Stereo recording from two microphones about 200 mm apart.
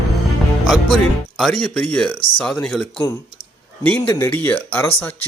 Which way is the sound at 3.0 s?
15° left (ahead or behind).